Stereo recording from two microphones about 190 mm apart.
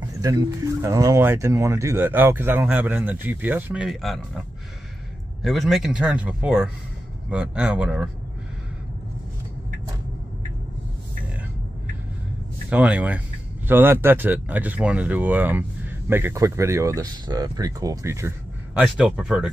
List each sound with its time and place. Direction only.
0.2 s speech: 20° right (ahead or behind); by 4.4 s centre (ahead or behind)
5.4 s speech: centre (ahead or behind)
12.6 s speech: 5° right (ahead or behind)